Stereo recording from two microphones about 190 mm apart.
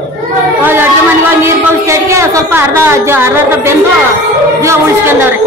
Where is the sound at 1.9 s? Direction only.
15° right (ahead or behind).